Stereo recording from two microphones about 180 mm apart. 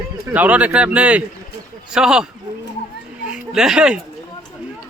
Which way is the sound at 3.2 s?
5° right (ahead or behind).